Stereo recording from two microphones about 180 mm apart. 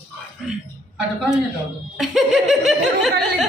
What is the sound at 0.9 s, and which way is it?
A man's voice, 5° right (ahead or behind).